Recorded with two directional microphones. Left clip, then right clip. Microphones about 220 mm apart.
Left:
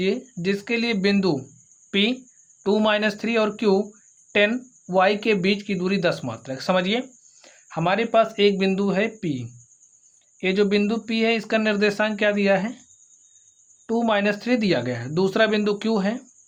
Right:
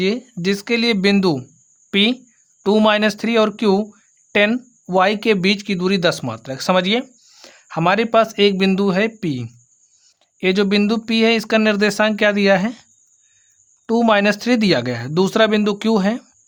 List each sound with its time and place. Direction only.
0.0 s speech: 40° right (ahead or behind)
13.8 s speech: 45° right (ahead or behind)